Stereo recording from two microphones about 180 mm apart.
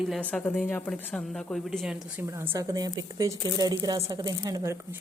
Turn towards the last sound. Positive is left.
turn(degrees=-20)  # may be behind; listen again after turning